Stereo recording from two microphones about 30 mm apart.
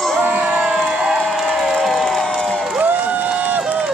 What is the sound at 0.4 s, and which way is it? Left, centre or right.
Crowd, right.